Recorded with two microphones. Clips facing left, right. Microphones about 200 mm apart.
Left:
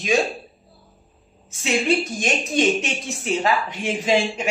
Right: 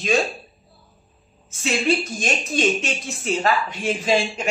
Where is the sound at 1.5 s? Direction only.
15° left (ahead or behind).